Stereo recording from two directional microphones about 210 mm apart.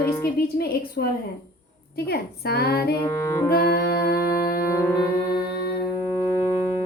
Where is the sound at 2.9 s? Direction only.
15° left (ahead or behind).